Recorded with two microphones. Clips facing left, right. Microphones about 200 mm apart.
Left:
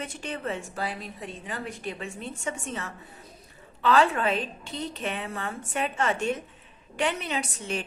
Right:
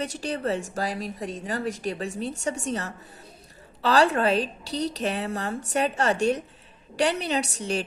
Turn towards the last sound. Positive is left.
turn(degrees=-35)  # may be behind; listen again after turning